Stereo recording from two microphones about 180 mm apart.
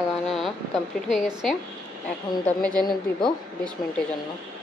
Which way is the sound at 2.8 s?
25° left (ahead or behind).